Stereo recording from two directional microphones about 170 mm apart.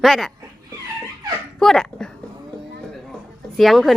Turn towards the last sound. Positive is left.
turn(degrees=0)  # may be behind; listen again after turning